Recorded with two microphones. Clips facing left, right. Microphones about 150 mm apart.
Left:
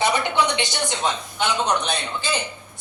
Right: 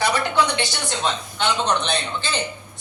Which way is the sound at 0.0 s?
20° left (ahead or behind).